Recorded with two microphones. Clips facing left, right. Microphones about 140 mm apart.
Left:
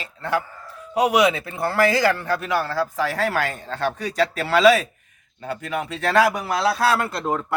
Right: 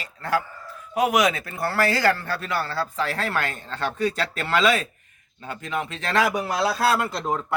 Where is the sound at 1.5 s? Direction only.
15° left (ahead or behind).